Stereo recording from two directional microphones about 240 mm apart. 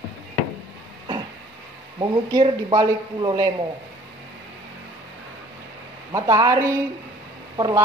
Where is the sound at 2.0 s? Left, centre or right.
Centre.